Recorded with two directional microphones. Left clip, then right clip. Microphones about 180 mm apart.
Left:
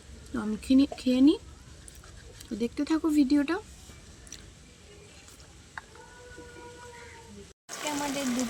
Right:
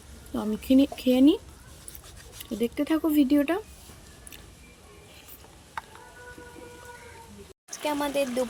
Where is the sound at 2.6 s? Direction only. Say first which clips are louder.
Right 3 dB; 20° left (ahead or behind).